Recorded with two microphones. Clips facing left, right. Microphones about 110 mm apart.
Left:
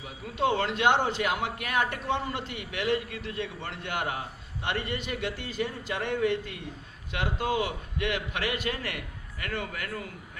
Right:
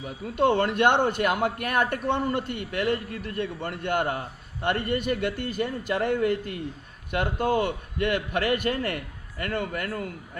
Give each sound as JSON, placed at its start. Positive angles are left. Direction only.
{"t": 0.3, "sound": "a man's voice", "side_deg": -55}